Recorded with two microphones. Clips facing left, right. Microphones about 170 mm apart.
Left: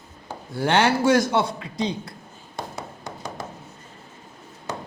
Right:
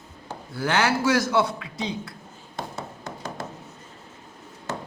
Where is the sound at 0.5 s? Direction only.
30° left (ahead or behind).